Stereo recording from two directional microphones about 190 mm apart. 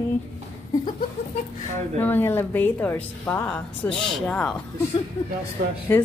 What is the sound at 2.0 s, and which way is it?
Speech, 10° left (ahead or behind).